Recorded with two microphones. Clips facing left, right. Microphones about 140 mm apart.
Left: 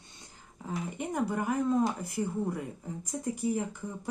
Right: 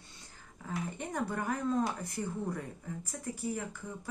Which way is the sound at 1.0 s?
15° left (ahead or behind).